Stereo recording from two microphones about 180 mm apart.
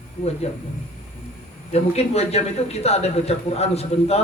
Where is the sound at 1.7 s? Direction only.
35° left (ahead or behind).